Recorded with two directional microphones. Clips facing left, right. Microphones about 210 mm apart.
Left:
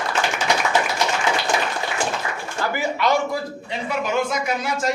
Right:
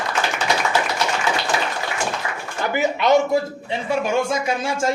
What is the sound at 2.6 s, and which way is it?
A man's voice, 20° right (ahead or behind).